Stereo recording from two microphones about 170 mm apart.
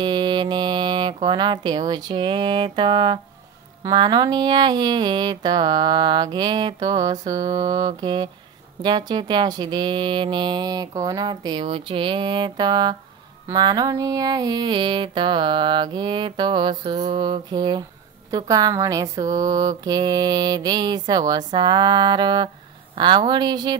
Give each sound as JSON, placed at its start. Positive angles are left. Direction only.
{"t": 0.0, "sound": "speech", "side_deg": -25}